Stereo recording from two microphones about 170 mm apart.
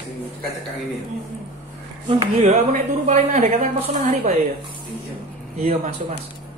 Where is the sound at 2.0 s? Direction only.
35° right (ahead or behind).